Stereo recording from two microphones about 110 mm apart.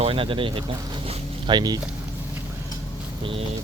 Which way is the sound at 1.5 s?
40° right (ahead or behind).